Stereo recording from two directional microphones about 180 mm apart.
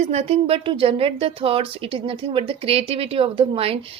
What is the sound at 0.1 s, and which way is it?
Speech, 35° right (ahead or behind).